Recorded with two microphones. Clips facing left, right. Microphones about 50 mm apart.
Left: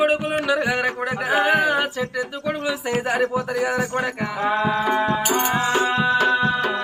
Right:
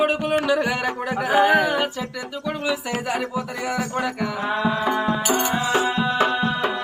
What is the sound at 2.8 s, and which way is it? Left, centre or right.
Speech, left.